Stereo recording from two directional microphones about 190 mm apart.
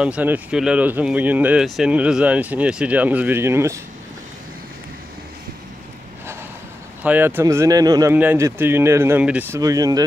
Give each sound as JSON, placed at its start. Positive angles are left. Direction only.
{"t": 0.0, "sound": "speech", "side_deg": -5}
{"t": 7.0, "sound": "speech", "side_deg": -10}